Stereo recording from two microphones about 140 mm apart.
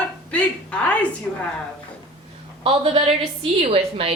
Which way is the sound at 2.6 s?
40° right (ahead or behind).